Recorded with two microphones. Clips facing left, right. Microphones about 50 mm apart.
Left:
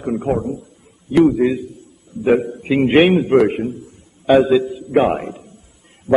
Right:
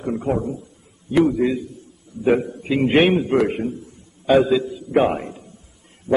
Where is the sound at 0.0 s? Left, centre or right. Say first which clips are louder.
Left 3 dB; centre.